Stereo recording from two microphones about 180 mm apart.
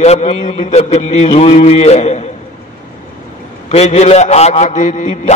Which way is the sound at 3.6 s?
40° left (ahead or behind).